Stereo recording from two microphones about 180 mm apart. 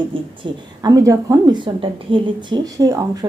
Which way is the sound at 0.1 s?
30° right (ahead or behind).